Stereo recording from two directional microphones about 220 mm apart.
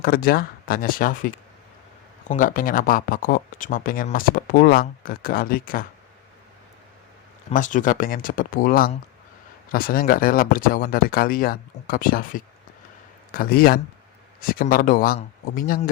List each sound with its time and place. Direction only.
0.0 s speech: 40° left (ahead or behind)
7.5 s speech: 35° left (ahead or behind)